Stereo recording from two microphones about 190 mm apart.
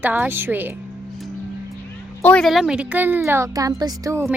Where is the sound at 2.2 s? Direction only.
5° left (ahead or behind); by 4.3 s 15° right (ahead or behind).